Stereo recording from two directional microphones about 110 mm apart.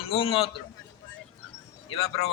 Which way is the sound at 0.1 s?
55° left (ahead or behind).